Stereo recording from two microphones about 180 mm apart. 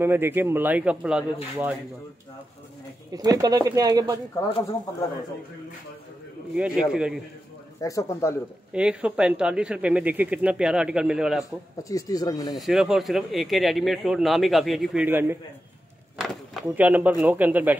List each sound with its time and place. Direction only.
0.0 s speech: 15° right (ahead or behind)
3.1 s speech: 20° right (ahead or behind)
6.5 s speech: 5° right (ahead or behind)
7.8 s speech: 15° left (ahead or behind)
8.7 s speech: 5° right (ahead or behind)
11.9 s speech: 20° left (ahead or behind)
12.5 s speech: centre (ahead or behind)
15.0 s speech: 10° right (ahead or behind)